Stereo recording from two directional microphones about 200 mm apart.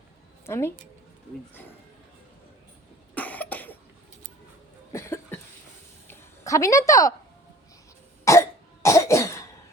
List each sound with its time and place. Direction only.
0.4 s a woman's voice: 15° left (ahead or behind)
3.2 s cough: 10° left (ahead or behind)
4.9 s cough: 15° left (ahead or behind)
6.1 s a sound: 15° left (ahead or behind)
8.2 s cough: 15° left (ahead or behind)